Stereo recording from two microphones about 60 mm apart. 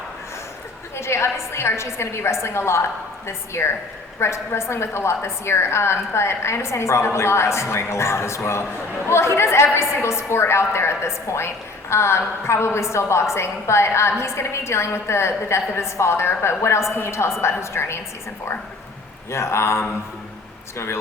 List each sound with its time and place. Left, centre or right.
0.9 s a woman's voice: left
19.3 s a woman's voice: left